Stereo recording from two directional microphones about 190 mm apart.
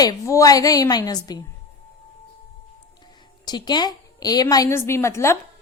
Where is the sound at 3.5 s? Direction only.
25° left (ahead or behind).